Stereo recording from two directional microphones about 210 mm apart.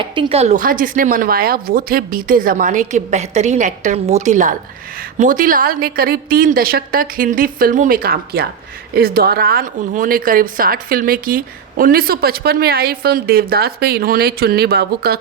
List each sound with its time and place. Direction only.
0.0 s a woman's voice: 25° right (ahead or behind); by 15.2 s 50° right (ahead or behind)